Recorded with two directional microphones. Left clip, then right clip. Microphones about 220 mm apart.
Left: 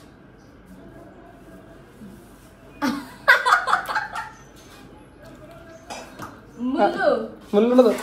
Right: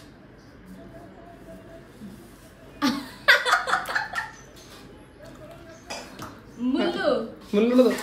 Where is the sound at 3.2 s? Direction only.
20° left (ahead or behind).